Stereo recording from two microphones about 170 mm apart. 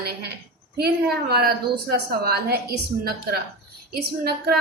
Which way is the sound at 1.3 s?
65° right (ahead or behind).